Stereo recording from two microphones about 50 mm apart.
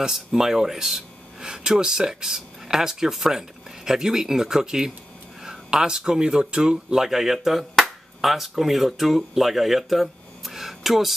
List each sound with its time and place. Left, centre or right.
0.0 s speech: centre
7.0 s speech: centre